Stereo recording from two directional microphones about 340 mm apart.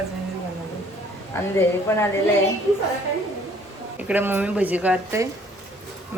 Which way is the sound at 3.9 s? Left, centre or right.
Centre.